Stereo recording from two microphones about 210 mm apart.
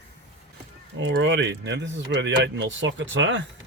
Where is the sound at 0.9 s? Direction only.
60° right (ahead or behind).